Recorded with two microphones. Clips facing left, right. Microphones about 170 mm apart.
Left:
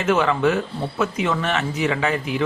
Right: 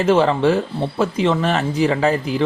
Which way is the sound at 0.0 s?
30° right (ahead or behind).